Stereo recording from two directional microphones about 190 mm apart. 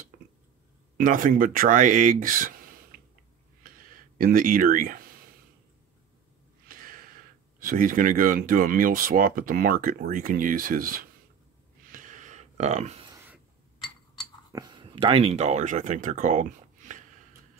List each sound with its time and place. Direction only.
0.1 s a sound: 45° right (ahead or behind)
0.9 s speech: 45° right (ahead or behind)
4.2 s speech: 45° right (ahead or behind)
6.7 s gasp: 50° right (ahead or behind)
7.6 s speech: 45° right (ahead or behind)
11.9 s a sound: 45° right (ahead or behind)
14.5 s speech: 25° right (ahead or behind); by 17.0 s 40° right (ahead or behind)